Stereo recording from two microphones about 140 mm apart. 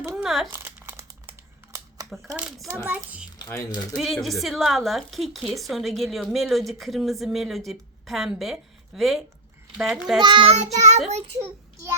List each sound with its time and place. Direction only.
0.1 s crumpling: centre (ahead or behind)
0.5 s crumpling: 15° right (ahead or behind)
2.7 s a child's voice: 15° right (ahead or behind)
3.3 s speech: 25° left (ahead or behind)
3.9 s a woman's voice: centre (ahead or behind)
10.2 s a child's voice: 35° right (ahead or behind)
10.5 s child singing: 55° right (ahead or behind)
11.4 s child singing: 20° right (ahead or behind)